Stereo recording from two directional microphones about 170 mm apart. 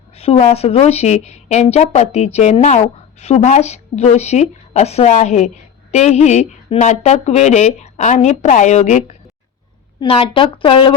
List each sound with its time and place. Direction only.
0.2 s a woman's voice: 35° left (ahead or behind)
10.0 s a woman's voice: 30° left (ahead or behind)